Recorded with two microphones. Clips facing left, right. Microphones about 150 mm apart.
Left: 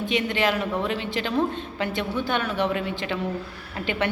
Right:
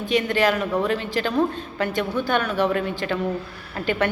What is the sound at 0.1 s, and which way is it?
A woman's voice, 45° right (ahead or behind).